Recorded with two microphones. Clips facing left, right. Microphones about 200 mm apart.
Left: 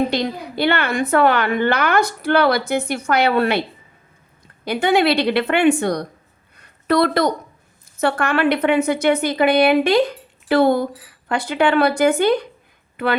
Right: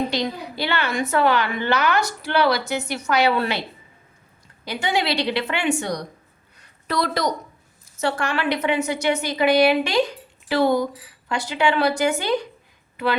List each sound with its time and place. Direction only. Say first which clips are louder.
0.1 s a woman's voice: left 3 dB; 55° left (ahead or behind)
4.6 s a woman's voice: left 7 dB; 55° left (ahead or behind)
6.6 s a sound: left 8 dB; 55° left (ahead or behind)
7.9 s a woman's voice: left 5 dB; 55° left (ahead or behind)